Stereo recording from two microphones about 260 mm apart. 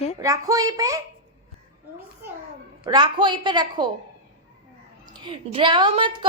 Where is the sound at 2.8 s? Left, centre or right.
Centre.